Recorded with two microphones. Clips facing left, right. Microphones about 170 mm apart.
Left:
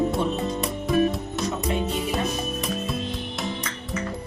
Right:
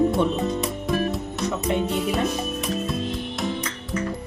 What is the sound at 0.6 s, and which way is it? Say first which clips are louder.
Music: left 2 dB; centre (ahead or behind).